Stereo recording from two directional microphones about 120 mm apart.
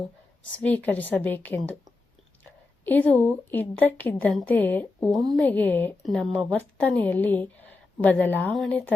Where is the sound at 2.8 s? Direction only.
15° left (ahead or behind).